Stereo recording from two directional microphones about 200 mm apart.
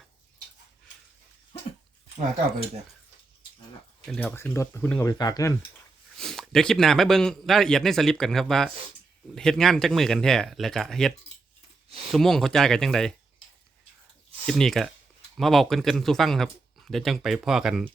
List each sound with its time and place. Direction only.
4.0 s speech: 5° left (ahead or behind)
5.1 s speech: 20° left (ahead or behind)
6.1 s a man's voice: centre (ahead or behind)
12.1 s a man's voice: centre (ahead or behind)
14.4 s a man's voice: centre (ahead or behind)